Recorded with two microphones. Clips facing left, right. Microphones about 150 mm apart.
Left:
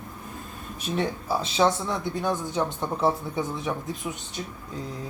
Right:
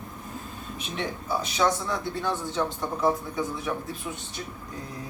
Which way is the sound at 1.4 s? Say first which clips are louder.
Left 3 dB; 25° left (ahead or behind).